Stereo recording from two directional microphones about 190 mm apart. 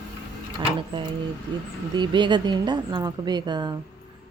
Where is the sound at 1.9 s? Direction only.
25° right (ahead or behind).